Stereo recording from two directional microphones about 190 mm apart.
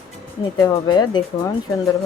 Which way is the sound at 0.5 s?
20° left (ahead or behind).